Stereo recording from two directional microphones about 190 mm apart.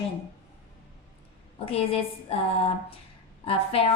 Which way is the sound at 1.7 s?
30° left (ahead or behind).